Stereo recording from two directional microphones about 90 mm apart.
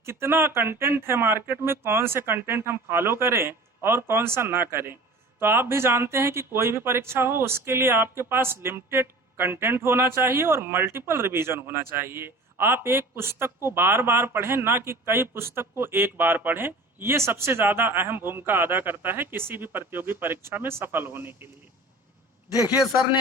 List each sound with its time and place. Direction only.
0.0 s speech: 30° right (ahead or behind)